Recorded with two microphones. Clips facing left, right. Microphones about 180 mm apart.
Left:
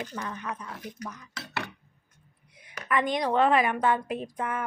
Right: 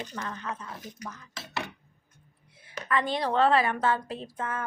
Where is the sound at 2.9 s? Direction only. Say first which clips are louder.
Left 2 dB; 15° left (ahead or behind).